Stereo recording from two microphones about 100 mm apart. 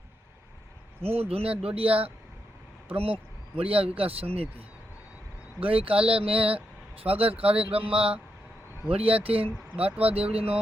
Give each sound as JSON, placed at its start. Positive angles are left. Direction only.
{"t": 1.0, "sound": "speech", "side_deg": -75}